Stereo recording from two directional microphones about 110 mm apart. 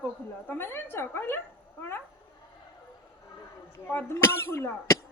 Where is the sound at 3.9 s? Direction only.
25° left (ahead or behind).